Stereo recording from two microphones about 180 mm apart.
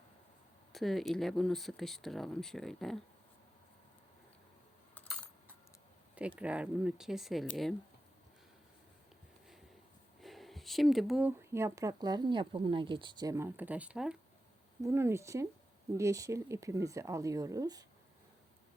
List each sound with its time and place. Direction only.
0.7 s speech: centre (ahead or behind)
5.0 s typing: 10° left (ahead or behind)
6.1 s speech: 5° right (ahead or behind)
10.2 s speech: centre (ahead or behind)
14.8 s speech: 15° right (ahead or behind)